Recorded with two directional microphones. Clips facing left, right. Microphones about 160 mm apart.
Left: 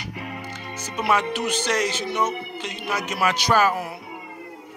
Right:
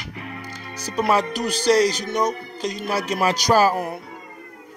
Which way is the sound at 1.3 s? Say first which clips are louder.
Right 6 dB; 35° right (ahead or behind).